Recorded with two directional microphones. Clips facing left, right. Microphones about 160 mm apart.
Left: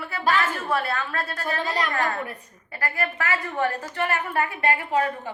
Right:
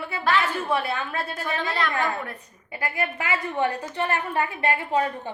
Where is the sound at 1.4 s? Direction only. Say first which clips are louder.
Left 2 dB; 40° left (ahead or behind).